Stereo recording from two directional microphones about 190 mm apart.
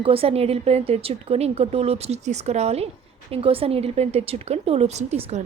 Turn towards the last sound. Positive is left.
turn(degrees=-35)  # may be behind; listen again after turning